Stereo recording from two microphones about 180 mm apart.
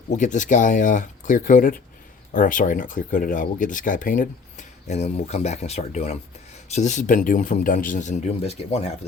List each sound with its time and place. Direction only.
0.1 s speech: 45° left (ahead or behind)